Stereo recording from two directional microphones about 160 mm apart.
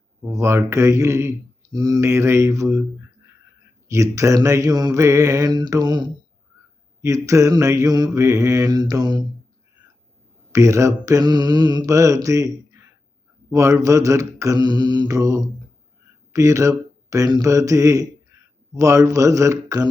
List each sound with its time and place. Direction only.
0.3 s speech: 15° right (ahead or behind)
3.8 s mantra: 20° right (ahead or behind)
10.5 s mantra: 20° right (ahead or behind)
13.5 s mantra: 20° right (ahead or behind)
16.3 s a man's voice: 20° right (ahead or behind)
18.7 s mantra: 20° right (ahead or behind)